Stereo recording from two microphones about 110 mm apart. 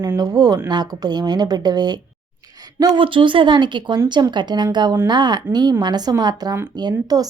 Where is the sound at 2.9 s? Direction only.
50° right (ahead or behind).